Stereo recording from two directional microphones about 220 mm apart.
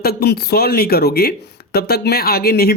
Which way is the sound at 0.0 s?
45° left (ahead or behind).